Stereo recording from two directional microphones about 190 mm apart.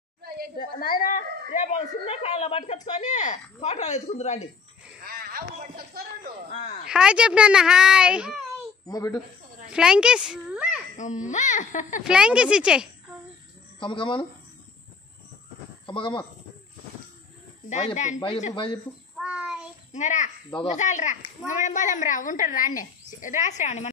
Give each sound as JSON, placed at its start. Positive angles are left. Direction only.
{"t": 0.6, "sound": "a woman's voice", "side_deg": 50}
{"t": 2.0, "sound": "a woman's voice", "side_deg": 35}
{"t": 5.0, "sound": "a sound", "side_deg": -50}
{"t": 6.9, "sound": "a child's voice", "side_deg": -5}
{"t": 8.8, "sound": "speech", "side_deg": 15}
{"t": 9.7, "sound": "a child's voice", "side_deg": -5}
{"t": 11.0, "sound": "a woman's voice", "side_deg": 40}
{"t": 12.0, "sound": "a child's voice", "side_deg": -5}
{"t": 13.7, "sound": "speech", "side_deg": 25}
{"t": 15.9, "sound": "speech", "side_deg": 25}
{"t": 17.6, "sound": "a woman's voice", "side_deg": 40}
{"t": 18.5, "sound": "speech", "side_deg": 25}
{"t": 19.1, "sound": "child singing", "side_deg": -5}
{"t": 19.9, "sound": "a child's voice", "side_deg": 40}